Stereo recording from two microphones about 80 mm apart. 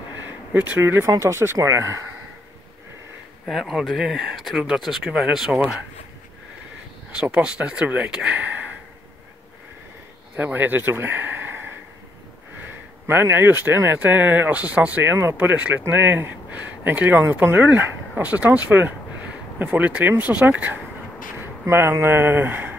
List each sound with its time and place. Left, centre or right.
0.5 s speech: right
3.4 s speech: centre
7.4 s speech: centre
10.3 s speech: right
13.0 s speech: right
15.0 s speech: right
21.4 s a sound: right
22.0 s speech: right